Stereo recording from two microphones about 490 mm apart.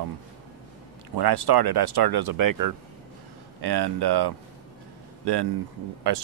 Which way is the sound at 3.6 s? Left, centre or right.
Right.